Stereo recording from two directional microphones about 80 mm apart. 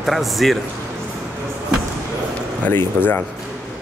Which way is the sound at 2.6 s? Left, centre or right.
Left.